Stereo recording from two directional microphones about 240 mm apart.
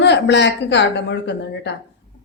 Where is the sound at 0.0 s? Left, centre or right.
Left.